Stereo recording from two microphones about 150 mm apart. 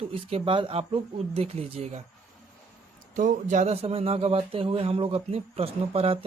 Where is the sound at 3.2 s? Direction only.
60° right (ahead or behind).